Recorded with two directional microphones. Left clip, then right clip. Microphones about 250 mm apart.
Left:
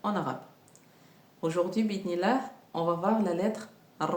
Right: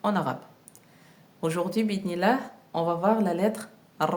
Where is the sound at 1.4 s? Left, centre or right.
Right.